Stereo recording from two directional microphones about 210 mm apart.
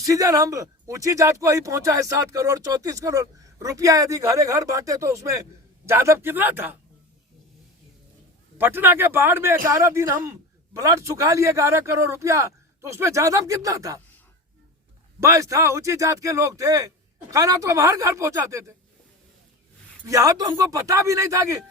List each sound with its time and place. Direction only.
0.0 s speech: 15° right (ahead or behind)
8.5 s speech: 10° right (ahead or behind)
15.2 s speech: 15° right (ahead or behind)
20.1 s speech: 15° right (ahead or behind)